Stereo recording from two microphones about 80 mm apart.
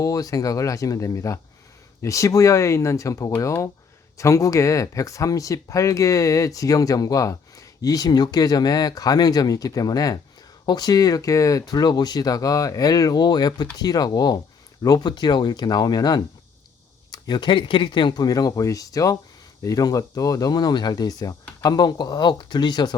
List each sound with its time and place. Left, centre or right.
0.0 s speech: left
18.3 s speech: left